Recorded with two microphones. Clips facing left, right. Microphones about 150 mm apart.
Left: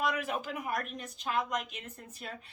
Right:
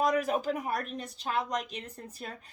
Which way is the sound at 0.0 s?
40° right (ahead or behind).